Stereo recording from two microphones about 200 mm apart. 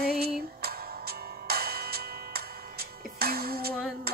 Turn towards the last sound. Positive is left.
turn(degrees=-50)  # may be behind; listen again after turning